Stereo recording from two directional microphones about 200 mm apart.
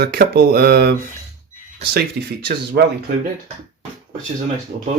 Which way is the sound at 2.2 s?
50° right (ahead or behind).